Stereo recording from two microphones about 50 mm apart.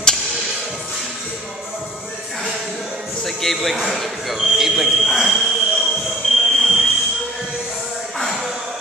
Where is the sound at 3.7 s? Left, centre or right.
Centre.